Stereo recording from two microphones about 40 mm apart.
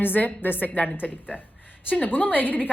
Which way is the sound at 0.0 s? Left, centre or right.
Left.